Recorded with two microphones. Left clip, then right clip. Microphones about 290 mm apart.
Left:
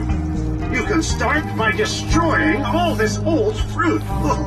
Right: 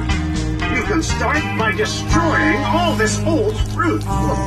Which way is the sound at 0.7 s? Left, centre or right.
Centre.